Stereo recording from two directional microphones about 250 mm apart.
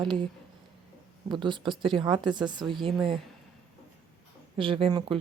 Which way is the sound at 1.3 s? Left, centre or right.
Centre.